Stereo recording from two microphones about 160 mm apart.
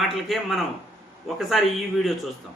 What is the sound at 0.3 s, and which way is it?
A man's voice, centre (ahead or behind).